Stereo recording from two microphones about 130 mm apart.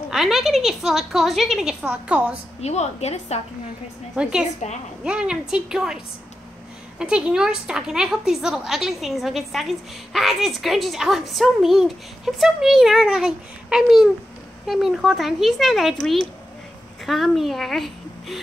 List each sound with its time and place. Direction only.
0.1 s a woman's voice: centre (ahead or behind)
2.6 s a woman's voice: 55° left (ahead or behind)
4.2 s a woman's voice: 5° right (ahead or behind)
7.0 s a woman's voice: 5° right (ahead or behind)